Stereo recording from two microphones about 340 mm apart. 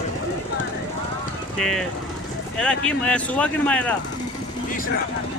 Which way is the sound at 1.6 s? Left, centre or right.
Centre.